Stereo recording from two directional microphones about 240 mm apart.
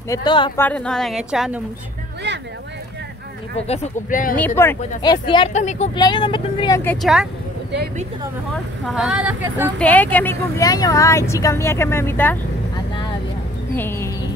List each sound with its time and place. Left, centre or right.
0.1 s speech: centre
0.6 s a woman's voice: centre
2.3 s a sound: right
3.5 s speech: left
4.6 s speech: centre; by 5.9 s left
5.9 s speech: centre
6.8 s a woman's voice: centre
8.8 s a woman's voice: centre
9.8 s speech: centre
13.7 s a sound: centre